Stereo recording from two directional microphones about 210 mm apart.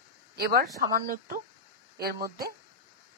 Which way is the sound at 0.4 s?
45° right (ahead or behind).